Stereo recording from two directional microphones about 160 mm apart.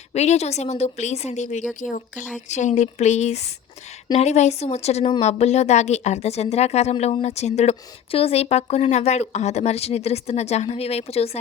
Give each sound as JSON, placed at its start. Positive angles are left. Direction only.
{"t": 0.1, "sound": "a woman's voice", "side_deg": 45}